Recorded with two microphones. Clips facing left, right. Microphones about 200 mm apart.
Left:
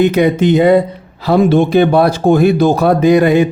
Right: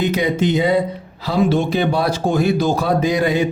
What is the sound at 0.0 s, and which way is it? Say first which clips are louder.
Speech: left 7 dB; 60° left (ahead or behind).